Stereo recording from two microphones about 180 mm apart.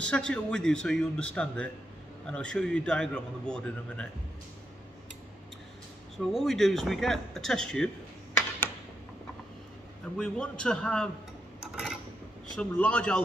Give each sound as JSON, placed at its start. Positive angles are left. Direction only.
{"t": 0.1, "sound": "a man's voice", "side_deg": 5}
{"t": 6.1, "sound": "a man's voice", "side_deg": 0}
{"t": 10.1, "sound": "a man's voice", "side_deg": 5}
{"t": 11.6, "sound": "a sound", "side_deg": -5}
{"t": 12.5, "sound": "speech", "side_deg": 10}